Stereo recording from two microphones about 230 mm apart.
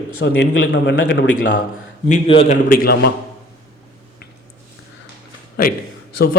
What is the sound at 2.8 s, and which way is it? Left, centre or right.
Speech, left.